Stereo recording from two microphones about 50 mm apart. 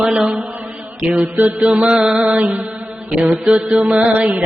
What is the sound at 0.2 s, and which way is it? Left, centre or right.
Speech, centre.